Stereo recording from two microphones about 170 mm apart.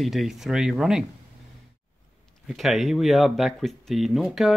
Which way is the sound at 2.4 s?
Centre (ahead or behind).